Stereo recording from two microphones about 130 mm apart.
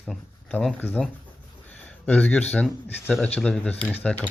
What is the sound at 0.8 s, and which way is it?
Speech, 15° left (ahead or behind).